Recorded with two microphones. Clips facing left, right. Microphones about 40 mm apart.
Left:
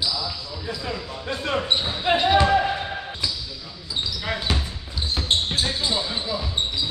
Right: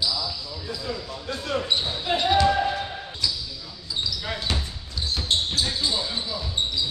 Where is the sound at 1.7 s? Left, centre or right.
Left.